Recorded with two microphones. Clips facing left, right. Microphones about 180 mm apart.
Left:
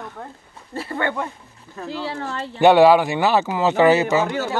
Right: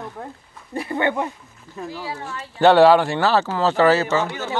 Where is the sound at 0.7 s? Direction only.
20° right (ahead or behind).